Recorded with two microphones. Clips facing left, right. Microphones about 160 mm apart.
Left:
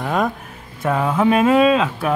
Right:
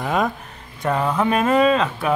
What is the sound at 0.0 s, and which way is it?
Speech, centre (ahead or behind).